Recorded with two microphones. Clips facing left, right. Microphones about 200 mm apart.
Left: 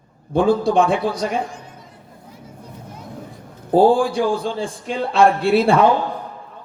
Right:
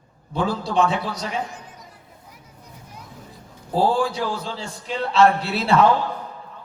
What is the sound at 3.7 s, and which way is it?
A man's voice, 55° left (ahead or behind).